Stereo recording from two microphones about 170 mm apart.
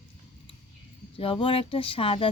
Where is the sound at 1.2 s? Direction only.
30° left (ahead or behind).